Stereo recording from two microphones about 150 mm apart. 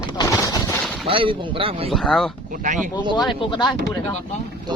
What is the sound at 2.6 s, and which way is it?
Speech, 60° right (ahead or behind).